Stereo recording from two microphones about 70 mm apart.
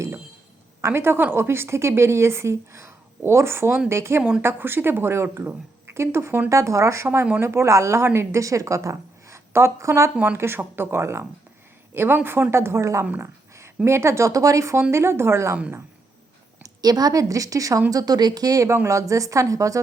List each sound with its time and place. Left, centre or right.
0.8 s a woman's voice: right
4.2 s speech: centre
4.4 s a woman's voice: right
10.3 s a woman's voice: right
16.6 s a woman's voice: right
17.9 s a woman's voice: right